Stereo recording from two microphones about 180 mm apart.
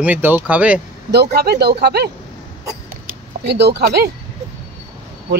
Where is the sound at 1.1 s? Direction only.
60° right (ahead or behind).